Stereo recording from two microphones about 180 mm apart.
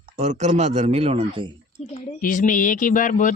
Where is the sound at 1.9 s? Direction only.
50° left (ahead or behind).